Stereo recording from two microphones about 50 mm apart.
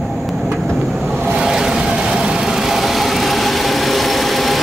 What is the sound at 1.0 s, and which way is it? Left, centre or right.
Vehicle, centre.